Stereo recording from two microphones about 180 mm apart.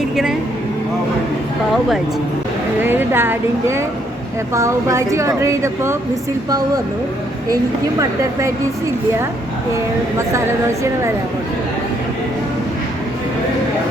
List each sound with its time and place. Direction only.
2.8 s a woman's voice: 10° right (ahead or behind)
7.5 s a woman's voice: 20° right (ahead or behind)